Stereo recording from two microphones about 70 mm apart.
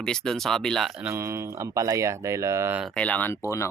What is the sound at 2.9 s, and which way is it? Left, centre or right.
Speech, left.